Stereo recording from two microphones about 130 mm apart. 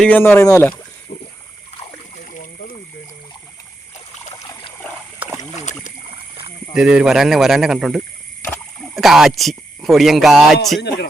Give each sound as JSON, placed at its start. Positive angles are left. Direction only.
{"t": 0.0, "sound": "speech", "side_deg": 15}
{"t": 1.8, "sound": "a sound", "side_deg": 70}
{"t": 5.2, "sound": "rowboat", "side_deg": -15}
{"t": 6.7, "sound": "speech", "side_deg": -5}